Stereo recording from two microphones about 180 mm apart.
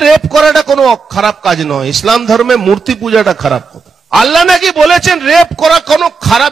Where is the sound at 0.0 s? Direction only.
Centre (ahead or behind).